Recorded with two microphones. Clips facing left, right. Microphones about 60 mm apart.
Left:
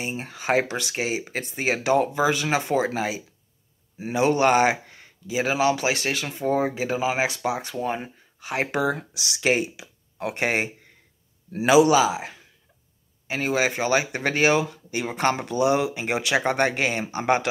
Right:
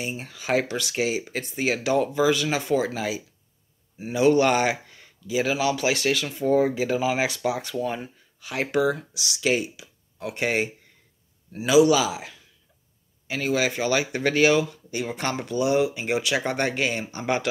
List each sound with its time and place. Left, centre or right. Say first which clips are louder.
0.0 s speech: left 2 dB; left
4.8 s a sound: left 2 dB; left
5.3 s speech: left 2 dB; left
5.8 s speech: right 2 dB; centre
7.7 s speech: even; left
10.4 s speech: even; left
14.7 s speech: left 1 dB; left
15.8 s speech: right 1 dB; left